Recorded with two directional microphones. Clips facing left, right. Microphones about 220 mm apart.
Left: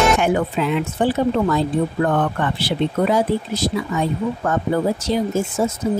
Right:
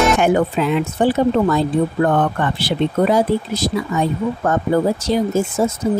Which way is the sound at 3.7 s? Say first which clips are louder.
Right 4 dB; 50° right (ahead or behind).